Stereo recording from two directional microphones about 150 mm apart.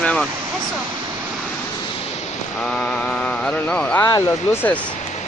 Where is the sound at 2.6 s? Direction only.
5° left (ahead or behind).